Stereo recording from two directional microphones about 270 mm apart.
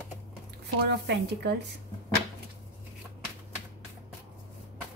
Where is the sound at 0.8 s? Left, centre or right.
Right.